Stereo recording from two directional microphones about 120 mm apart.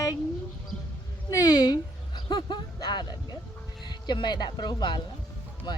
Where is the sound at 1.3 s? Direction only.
30° left (ahead or behind).